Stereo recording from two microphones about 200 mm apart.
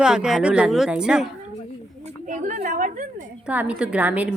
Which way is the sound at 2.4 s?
40° right (ahead or behind).